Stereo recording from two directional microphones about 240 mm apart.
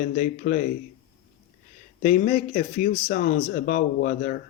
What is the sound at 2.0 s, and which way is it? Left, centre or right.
Speech, left.